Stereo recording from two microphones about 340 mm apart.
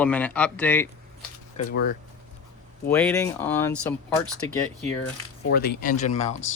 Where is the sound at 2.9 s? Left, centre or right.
Centre.